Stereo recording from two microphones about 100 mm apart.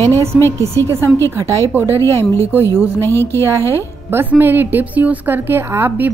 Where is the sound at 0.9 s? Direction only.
25° right (ahead or behind).